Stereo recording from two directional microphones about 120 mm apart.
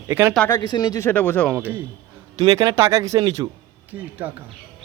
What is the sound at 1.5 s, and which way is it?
Speech, 15° right (ahead or behind).